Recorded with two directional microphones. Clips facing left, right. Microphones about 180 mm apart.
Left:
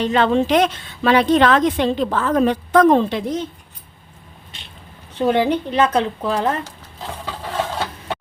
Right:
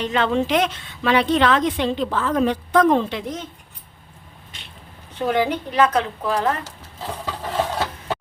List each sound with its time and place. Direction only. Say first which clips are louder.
0.0 s a woman's voice: left 4 dB; 35° left (ahead or behind)
5.2 s a woman's voice: left 4 dB; 30° left (ahead or behind)